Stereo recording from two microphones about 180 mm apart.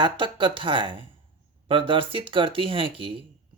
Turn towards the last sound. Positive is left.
turn(degrees=-30)  # may be behind; listen again after turning